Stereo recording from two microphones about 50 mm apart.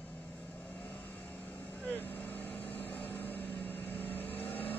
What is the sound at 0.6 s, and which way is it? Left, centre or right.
Vehicle, left.